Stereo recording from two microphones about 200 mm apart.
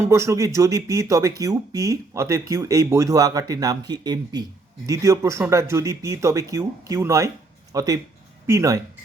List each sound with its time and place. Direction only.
0.0 s speech: 15° right (ahead or behind)